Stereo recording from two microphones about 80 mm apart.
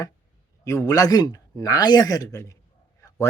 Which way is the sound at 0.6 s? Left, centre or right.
Left.